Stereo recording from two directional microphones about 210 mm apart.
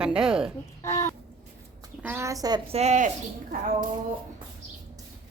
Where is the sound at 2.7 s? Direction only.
35° right (ahead or behind).